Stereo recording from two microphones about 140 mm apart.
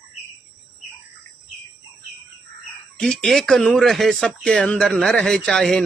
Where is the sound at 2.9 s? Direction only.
5° left (ahead or behind).